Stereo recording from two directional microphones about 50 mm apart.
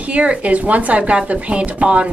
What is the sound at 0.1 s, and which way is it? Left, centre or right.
A woman's voice, right.